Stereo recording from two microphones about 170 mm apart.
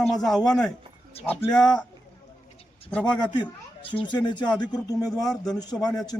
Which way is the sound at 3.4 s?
30° left (ahead or behind).